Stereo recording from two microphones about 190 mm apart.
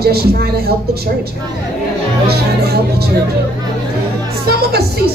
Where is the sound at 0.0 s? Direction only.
55° right (ahead or behind).